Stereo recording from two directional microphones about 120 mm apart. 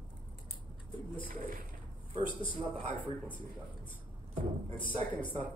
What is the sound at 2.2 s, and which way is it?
Speech, 45° left (ahead or behind).